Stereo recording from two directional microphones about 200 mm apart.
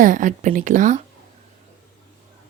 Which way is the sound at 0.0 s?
40° right (ahead or behind).